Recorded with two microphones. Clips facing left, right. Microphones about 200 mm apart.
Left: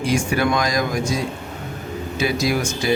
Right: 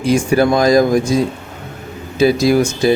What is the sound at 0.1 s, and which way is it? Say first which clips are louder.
Speech: right 7 dB; 35° right (ahead or behind).